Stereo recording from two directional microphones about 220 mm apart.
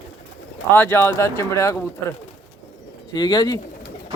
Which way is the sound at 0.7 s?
10° left (ahead or behind).